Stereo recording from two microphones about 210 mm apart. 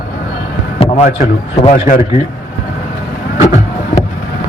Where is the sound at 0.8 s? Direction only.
30° left (ahead or behind).